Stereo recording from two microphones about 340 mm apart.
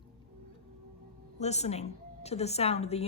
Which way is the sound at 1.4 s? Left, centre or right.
Centre.